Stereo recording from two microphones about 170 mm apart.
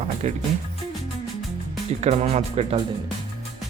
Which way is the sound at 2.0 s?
40° right (ahead or behind).